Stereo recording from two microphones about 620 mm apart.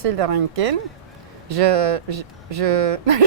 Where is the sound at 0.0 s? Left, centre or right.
Right.